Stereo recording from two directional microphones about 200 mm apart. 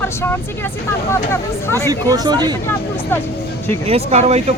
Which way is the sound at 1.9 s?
20° right (ahead or behind).